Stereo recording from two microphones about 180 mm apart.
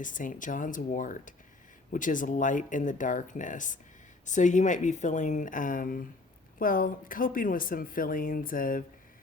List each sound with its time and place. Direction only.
0.0 s speech: 45° left (ahead or behind)